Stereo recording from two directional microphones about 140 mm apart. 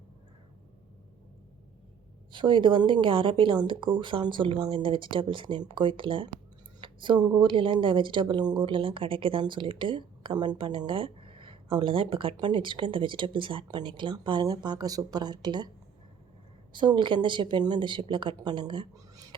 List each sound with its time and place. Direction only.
2.3 s speech: 35° right (ahead or behind)
16.7 s speech: 35° right (ahead or behind)